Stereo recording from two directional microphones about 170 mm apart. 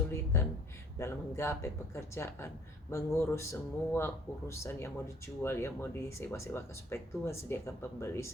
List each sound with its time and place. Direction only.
0.9 s speech: 15° left (ahead or behind)